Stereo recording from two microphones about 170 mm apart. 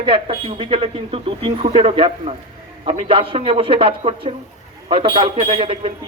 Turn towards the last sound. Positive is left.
turn(degrees=-35)  # may be behind; listen again after turning